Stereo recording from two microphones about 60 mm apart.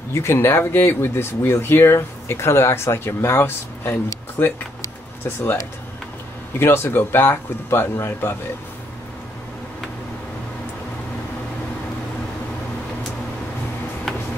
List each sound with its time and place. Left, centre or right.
0.1 s speech: left
4.4 s speech: left
6.6 s speech: left